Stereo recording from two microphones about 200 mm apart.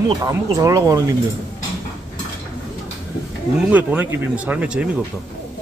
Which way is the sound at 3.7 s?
10° right (ahead or behind).